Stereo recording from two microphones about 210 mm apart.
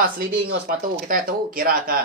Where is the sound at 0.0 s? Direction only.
45° right (ahead or behind).